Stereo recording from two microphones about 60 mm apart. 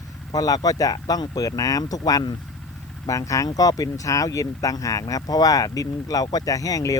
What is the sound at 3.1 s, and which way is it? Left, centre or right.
Speech, left.